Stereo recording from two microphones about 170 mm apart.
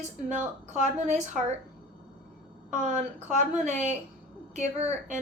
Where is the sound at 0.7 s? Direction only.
45° right (ahead or behind).